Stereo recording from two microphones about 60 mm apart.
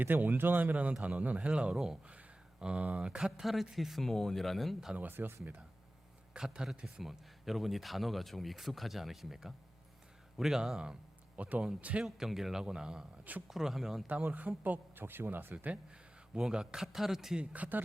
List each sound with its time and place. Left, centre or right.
0.0 s speech: right; by 1.8 s centre
2.0 s a sound: centre
3.2 s speech: centre
4.9 s speech: right
6.3 s a man's voice: centre
11.3 s speech: right
12.0 s a man's voice: centre
14.1 s speech: right
15.5 s speech: right
16.4 s speech: centre
17.4 s speech: right